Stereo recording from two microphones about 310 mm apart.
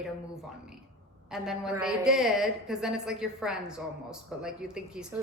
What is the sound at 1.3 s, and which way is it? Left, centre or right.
Speech, centre.